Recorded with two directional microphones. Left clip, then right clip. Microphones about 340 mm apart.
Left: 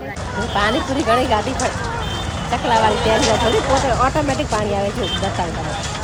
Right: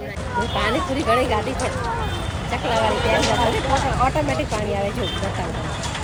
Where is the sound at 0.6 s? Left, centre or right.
Centre.